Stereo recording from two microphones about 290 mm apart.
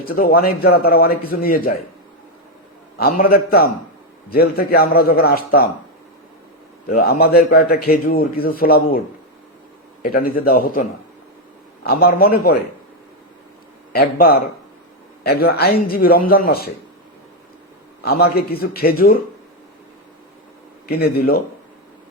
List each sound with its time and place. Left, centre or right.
0.0 s a man's voice: left
3.0 s a man's voice: left
6.8 s a man's voice: left
10.0 s a man's voice: left
13.9 s a man's voice: left
18.0 s a man's voice: left
20.8 s a man's voice: left